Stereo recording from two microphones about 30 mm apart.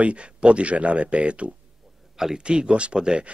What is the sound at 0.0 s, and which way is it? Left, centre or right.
Speech, right.